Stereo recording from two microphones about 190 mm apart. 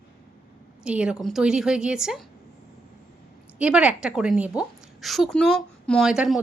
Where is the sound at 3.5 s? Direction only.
5° right (ahead or behind).